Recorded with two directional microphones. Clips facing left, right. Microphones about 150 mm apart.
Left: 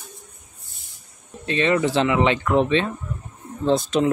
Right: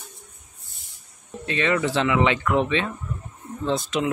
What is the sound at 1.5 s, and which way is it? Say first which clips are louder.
Speech: left 3 dB; 25° left (ahead or behind).